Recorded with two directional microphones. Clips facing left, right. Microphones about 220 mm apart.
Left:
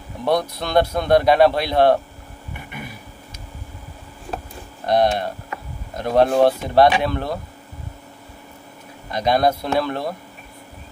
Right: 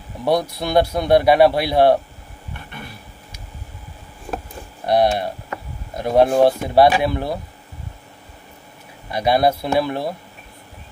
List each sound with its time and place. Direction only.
0.2 s a man's voice: 10° right (ahead or behind)
2.5 s a sound: 10° left (ahead or behind)
4.8 s a man's voice: 10° right (ahead or behind)
9.1 s a man's voice: 10° right (ahead or behind)